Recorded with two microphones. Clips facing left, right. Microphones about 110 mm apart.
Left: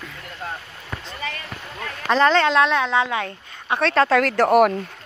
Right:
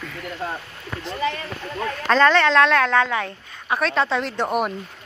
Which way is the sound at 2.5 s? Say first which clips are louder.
Right 2 dB; 5° left (ahead or behind).